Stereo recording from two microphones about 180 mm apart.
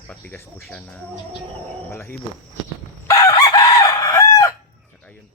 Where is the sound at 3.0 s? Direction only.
20° left (ahead or behind).